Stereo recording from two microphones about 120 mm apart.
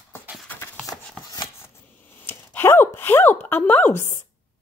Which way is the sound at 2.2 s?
15° left (ahead or behind).